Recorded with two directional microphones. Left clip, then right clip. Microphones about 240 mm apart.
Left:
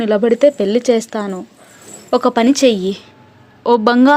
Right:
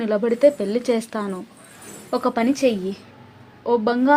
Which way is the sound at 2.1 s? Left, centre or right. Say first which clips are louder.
Left 8 dB; left.